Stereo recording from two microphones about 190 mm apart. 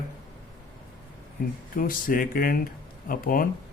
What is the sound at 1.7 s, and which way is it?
Speech, 50° left (ahead or behind).